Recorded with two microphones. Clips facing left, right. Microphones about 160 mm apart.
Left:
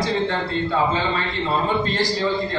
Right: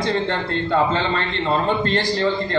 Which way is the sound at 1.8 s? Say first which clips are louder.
Right 2 dB; 60° right (ahead or behind).